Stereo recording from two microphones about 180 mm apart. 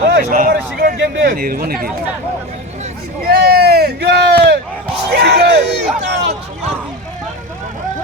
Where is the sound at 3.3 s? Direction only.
60° right (ahead or behind).